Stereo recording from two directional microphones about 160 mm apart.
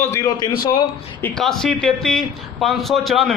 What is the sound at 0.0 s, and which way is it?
Speech, 20° left (ahead or behind).